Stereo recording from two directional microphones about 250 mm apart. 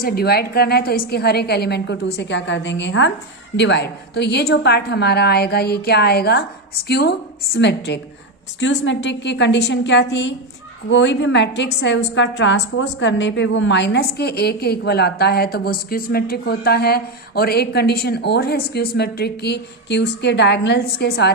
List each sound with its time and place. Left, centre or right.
0.0 s a woman's voice: left